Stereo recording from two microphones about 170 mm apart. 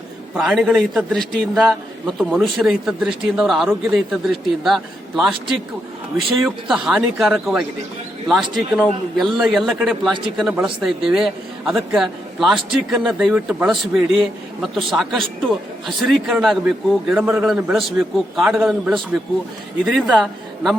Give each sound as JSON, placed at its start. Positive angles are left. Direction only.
{"t": 0.3, "sound": "a man's voice", "side_deg": -5}
{"t": 10.1, "sound": "a man's voice", "side_deg": -30}
{"t": 10.3, "sound": "a man's voice", "side_deg": -5}